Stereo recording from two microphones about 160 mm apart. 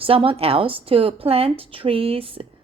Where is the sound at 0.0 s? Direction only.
35° right (ahead or behind).